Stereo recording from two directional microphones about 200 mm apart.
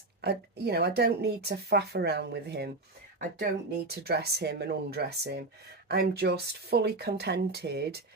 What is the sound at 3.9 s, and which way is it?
Speech, 55° right (ahead or behind).